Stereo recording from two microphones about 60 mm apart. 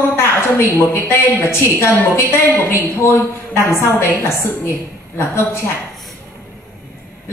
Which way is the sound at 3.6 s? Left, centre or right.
Left.